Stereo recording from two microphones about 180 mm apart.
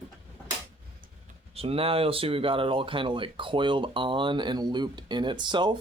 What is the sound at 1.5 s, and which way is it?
Speech, 30° right (ahead or behind).